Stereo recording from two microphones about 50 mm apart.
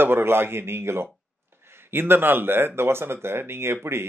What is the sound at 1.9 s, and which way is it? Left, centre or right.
Speech, right.